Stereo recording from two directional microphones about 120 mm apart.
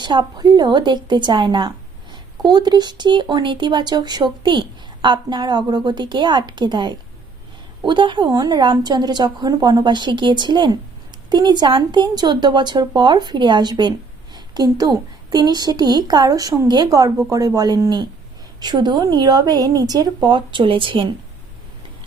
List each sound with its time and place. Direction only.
0.0 s speech: 40° right (ahead or behind)